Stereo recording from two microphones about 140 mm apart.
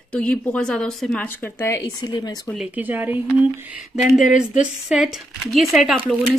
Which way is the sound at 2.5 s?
10° right (ahead or behind).